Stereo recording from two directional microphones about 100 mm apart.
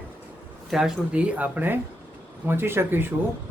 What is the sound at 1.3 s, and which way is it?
Speech, 15° right (ahead or behind).